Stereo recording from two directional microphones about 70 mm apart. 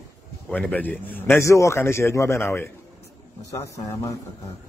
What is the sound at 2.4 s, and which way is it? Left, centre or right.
Speech, left.